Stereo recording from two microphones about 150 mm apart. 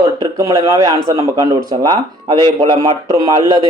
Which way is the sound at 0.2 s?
25° right (ahead or behind).